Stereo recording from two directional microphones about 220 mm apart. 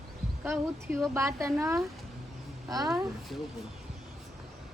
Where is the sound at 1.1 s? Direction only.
15° right (ahead or behind).